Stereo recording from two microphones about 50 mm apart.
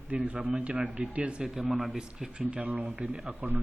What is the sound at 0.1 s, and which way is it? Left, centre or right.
Speech, right.